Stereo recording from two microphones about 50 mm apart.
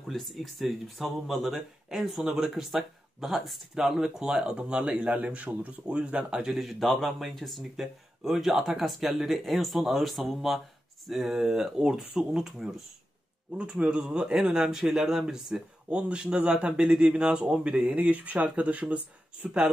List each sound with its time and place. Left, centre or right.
0.1 s speech: centre; by 6.4 s right
6.4 s speech: centre
13.6 s speech: right; by 15.6 s centre
15.9 s speech: right
17.8 s speech: right
19.4 s speech: centre